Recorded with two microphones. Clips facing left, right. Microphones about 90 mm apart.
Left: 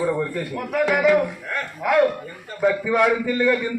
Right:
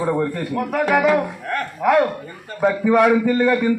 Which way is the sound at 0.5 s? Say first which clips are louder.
Right 3 dB; 45° right (ahead or behind).